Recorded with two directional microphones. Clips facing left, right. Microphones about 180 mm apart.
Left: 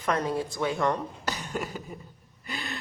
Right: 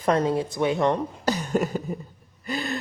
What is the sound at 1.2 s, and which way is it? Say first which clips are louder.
Beatboxing: right 10 dB; 45° right (ahead or behind).